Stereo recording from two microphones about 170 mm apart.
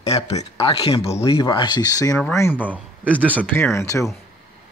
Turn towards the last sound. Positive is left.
turn(degrees=20)  # may be behind; listen again after turning